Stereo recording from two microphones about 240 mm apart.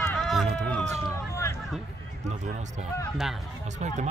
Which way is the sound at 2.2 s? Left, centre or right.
Right.